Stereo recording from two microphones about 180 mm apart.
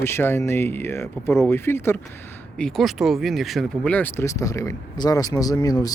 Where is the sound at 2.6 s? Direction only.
Centre (ahead or behind); by 5.9 s 20° left (ahead or behind).